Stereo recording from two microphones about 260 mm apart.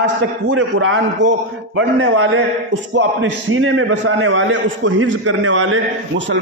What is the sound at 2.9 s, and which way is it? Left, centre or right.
A man's voice, right.